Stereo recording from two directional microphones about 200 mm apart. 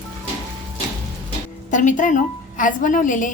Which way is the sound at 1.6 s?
40° left (ahead or behind).